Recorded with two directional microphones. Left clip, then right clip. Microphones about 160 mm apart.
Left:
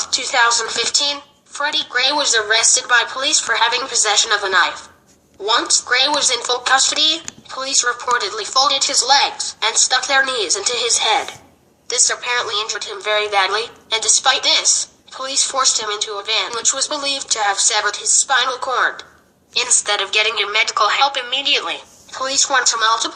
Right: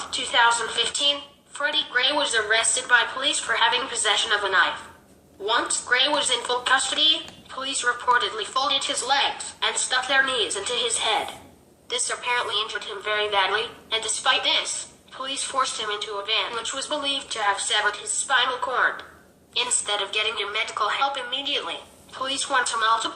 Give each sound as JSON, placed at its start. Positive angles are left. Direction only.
{"t": 0.1, "sound": "a woman's voice", "side_deg": 45}